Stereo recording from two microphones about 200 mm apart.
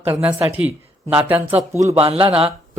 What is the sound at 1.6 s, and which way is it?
Speech, 35° right (ahead or behind).